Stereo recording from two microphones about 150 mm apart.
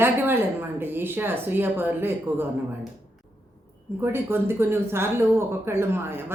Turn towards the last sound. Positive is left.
turn(degrees=-15)  # may be behind; listen again after turning